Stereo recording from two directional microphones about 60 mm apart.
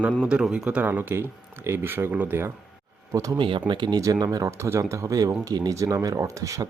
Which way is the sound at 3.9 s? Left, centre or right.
Right.